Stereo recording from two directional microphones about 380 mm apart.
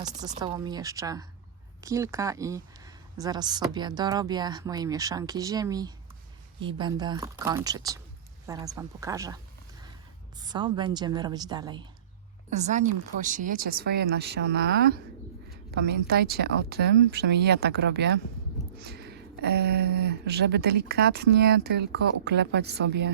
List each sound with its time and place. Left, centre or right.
0.0 s speech: centre
10.4 s speech: centre; by 23.1 s right